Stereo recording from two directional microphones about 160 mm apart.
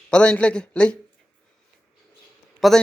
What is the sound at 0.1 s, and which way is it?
Speech, 5° left (ahead or behind).